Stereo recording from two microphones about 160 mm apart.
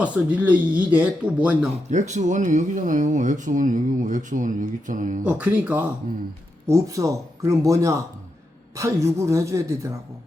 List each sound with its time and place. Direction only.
0.0 s speech: 10° right (ahead or behind)
1.9 s speech: 50° right (ahead or behind)
5.2 s speech: 10° right (ahead or behind)